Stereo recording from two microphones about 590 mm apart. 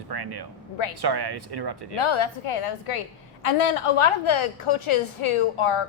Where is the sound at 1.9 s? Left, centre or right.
Left.